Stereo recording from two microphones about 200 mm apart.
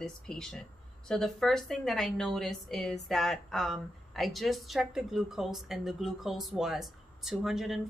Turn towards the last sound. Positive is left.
turn(degrees=0)  # may be behind; listen again after turning